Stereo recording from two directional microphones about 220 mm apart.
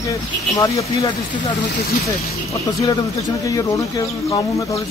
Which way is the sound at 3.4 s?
15° left (ahead or behind).